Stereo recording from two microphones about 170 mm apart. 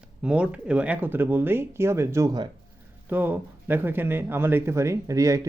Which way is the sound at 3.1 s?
10° right (ahead or behind).